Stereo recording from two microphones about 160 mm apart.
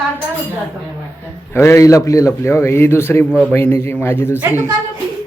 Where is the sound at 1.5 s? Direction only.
15° left (ahead or behind).